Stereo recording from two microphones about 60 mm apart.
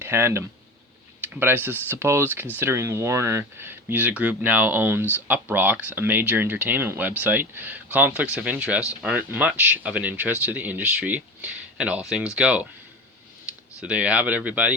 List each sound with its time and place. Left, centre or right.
0.0 s speech: right; by 12.6 s centre
13.8 s speech: right